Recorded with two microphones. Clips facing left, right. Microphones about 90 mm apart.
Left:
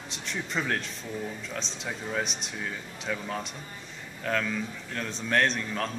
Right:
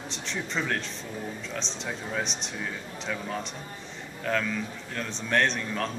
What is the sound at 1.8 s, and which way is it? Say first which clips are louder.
Speech: left 1 dB; centre (ahead or behind).